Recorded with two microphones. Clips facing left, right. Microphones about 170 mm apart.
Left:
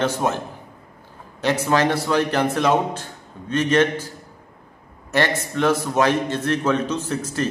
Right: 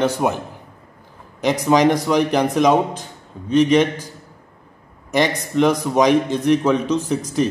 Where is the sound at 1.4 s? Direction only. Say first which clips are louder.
Right 4 dB; 15° right (ahead or behind).